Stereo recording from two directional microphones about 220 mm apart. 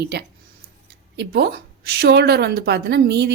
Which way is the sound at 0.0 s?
50° right (ahead or behind).